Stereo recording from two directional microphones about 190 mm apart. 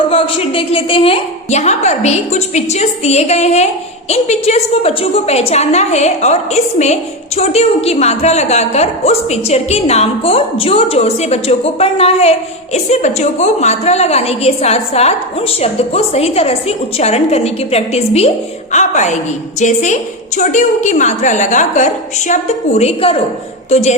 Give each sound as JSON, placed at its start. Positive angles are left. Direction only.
{"t": 0.0, "sound": "a woman's voice", "side_deg": 30}